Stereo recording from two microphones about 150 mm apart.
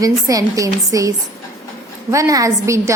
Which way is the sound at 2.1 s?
20° right (ahead or behind).